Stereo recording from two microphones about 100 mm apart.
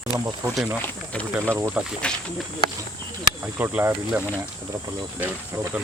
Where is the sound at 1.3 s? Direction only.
25° right (ahead or behind).